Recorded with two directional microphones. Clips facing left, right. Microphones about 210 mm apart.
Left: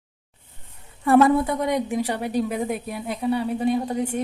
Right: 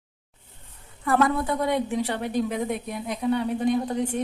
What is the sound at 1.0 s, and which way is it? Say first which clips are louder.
A woman's voice: left 6 dB; 25° left (ahead or behind).